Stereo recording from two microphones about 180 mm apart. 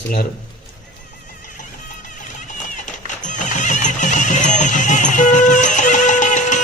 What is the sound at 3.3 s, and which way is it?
Music, 45° left (ahead or behind).